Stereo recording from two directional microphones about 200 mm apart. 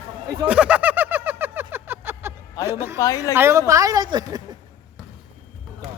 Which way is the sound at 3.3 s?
15° right (ahead or behind).